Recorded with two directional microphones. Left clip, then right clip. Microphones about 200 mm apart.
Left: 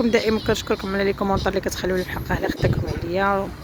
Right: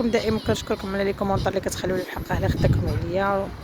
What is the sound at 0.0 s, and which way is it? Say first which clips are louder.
Speech: left 3 dB; 5° left (ahead or behind).